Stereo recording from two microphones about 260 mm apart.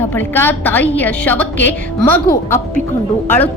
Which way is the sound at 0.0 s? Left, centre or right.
Centre.